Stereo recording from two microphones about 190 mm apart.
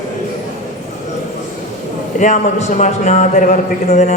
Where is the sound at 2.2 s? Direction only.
40° left (ahead or behind).